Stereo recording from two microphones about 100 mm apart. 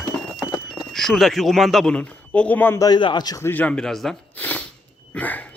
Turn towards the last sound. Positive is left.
turn(degrees=15)  # may be behind; listen again after turning